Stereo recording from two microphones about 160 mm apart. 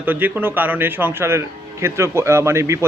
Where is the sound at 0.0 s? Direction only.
10° right (ahead or behind).